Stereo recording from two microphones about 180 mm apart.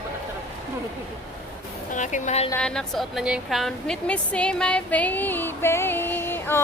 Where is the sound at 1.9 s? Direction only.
45° left (ahead or behind).